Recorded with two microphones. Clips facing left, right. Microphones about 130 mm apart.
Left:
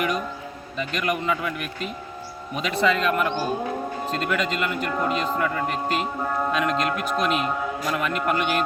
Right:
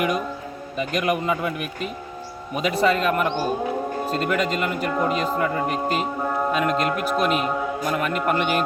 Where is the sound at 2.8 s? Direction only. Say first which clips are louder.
Right 1 dB; 45° right (ahead or behind).